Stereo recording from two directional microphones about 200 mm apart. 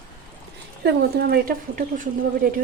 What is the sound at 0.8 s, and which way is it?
Speech, 50° right (ahead or behind).